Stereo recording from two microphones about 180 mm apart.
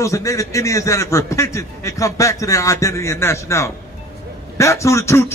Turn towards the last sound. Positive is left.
turn(degrees=15)  # may be behind; listen again after turning